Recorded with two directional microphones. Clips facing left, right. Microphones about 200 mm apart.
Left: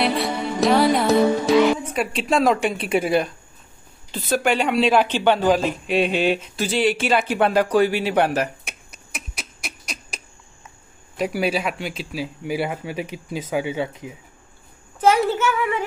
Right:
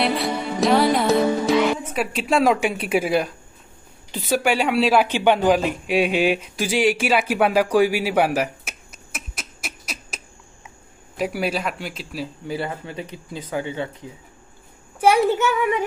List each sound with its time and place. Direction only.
0.0 s music: centre (ahead or behind)
2.0 s a woman's voice: 5° right (ahead or behind)
12.4 s speech: 10° left (ahead or behind)
15.0 s a woman's voice: 15° right (ahead or behind)